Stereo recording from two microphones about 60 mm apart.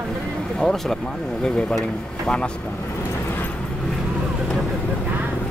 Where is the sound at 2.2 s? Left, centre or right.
Centre.